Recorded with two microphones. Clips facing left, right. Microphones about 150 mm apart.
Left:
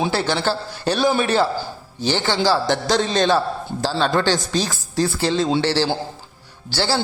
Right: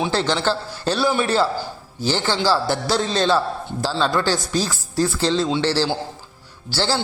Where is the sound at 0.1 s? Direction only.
10° left (ahead or behind).